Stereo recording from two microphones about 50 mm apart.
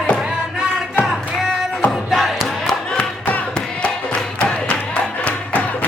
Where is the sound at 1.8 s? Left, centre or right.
Centre.